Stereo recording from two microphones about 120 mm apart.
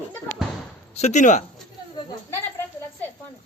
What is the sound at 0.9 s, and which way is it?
Speech, 80° left.